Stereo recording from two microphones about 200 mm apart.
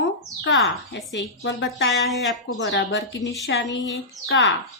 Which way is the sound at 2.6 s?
65° left (ahead or behind).